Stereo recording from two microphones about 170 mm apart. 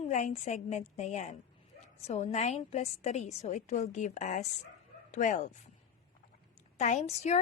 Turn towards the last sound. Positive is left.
turn(degrees=40)  # may be behind; listen again after turning